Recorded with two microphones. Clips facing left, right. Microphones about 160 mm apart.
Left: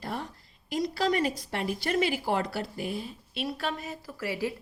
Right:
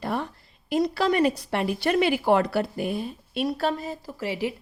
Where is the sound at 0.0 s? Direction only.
65° right (ahead or behind).